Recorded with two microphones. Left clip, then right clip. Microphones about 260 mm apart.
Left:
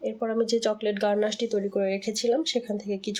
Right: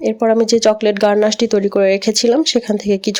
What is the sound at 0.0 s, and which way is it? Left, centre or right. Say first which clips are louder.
Speech: right 13 dB; right.